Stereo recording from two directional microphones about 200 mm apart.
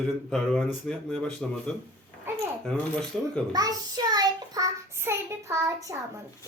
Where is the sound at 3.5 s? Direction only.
20° right (ahead or behind).